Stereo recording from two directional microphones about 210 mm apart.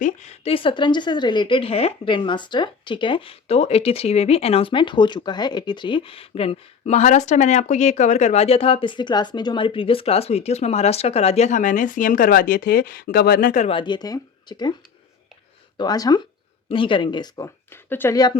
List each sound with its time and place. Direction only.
0.0 s a woman's voice: 35° left (ahead or behind)
13.7 s a woman's voice: 25° left (ahead or behind)
15.8 s a woman's voice: 20° left (ahead or behind)